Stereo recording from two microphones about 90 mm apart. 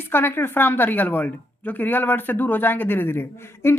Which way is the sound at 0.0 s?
25° left (ahead or behind).